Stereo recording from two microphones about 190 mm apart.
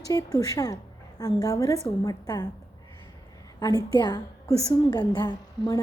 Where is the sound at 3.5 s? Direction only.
20° left (ahead or behind).